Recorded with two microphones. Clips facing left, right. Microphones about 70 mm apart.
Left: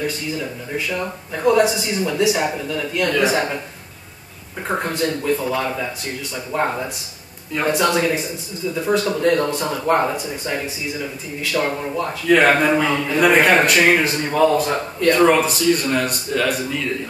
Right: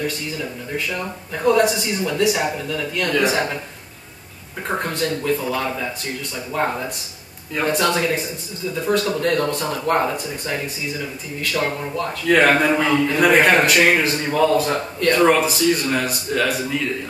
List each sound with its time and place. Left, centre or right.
0.0 s speech: centre
4.6 s speech: centre
11.7 s speech: centre